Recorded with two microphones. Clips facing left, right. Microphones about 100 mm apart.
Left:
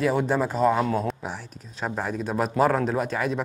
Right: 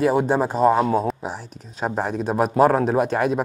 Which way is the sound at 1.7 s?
30° right (ahead or behind).